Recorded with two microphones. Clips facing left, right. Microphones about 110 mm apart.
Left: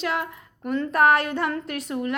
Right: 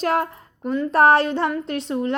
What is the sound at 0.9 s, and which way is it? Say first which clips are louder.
A woman's voice: right 4 dB; 30° right (ahead or behind).